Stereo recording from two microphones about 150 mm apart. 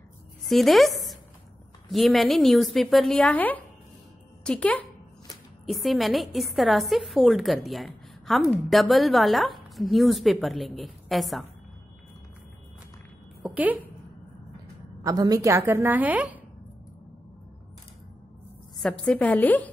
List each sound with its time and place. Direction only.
0.5 s a woman's voice: centre (ahead or behind)
13.4 s a sound: 10° right (ahead or behind)
15.0 s a woman's voice: 25° right (ahead or behind)
18.8 s a woman's voice: 5° left (ahead or behind)